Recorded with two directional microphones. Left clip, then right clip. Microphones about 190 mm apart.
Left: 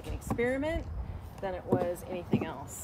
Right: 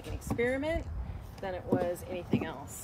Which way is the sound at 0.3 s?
10° left (ahead or behind).